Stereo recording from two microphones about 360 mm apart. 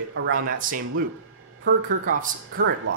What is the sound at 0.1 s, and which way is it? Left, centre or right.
Speech, right.